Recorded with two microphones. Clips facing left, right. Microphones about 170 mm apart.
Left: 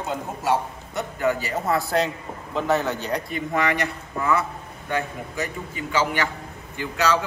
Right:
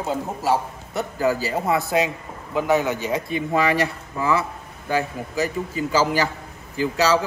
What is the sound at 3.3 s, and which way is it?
A man's voice, 30° right (ahead or behind).